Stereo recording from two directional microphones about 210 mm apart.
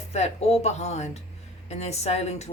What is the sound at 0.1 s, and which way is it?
A woman's voice, 30° left (ahead or behind).